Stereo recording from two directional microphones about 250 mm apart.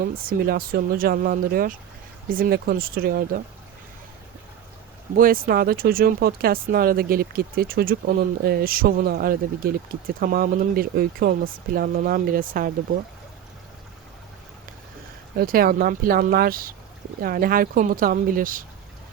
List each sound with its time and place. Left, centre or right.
0.1 s speech: right
5.1 s speech: right
15.4 s speech: right